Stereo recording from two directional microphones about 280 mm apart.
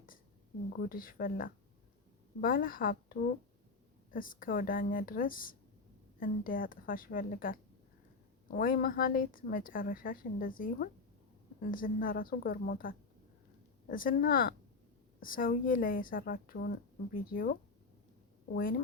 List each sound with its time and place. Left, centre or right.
0.7 s a woman's voice: left